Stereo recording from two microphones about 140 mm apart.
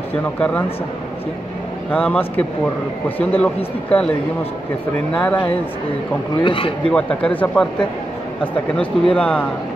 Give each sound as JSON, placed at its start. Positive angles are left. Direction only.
{"t": 0.4, "sound": "speech", "side_deg": 10}
{"t": 1.9, "sound": "speech", "side_deg": 10}
{"t": 5.1, "sound": "speech", "side_deg": 10}
{"t": 6.4, "sound": "speech", "side_deg": 35}
{"t": 6.9, "sound": "speech", "side_deg": 5}
{"t": 8.7, "sound": "speech", "side_deg": 5}